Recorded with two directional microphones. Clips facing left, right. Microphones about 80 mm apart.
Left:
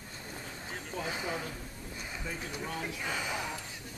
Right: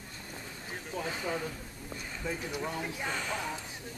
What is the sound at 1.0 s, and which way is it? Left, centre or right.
Speech, centre.